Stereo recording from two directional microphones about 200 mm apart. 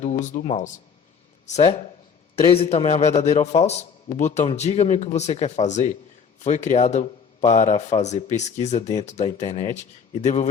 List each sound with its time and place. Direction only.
0.0 s speech: 35° left (ahead or behind)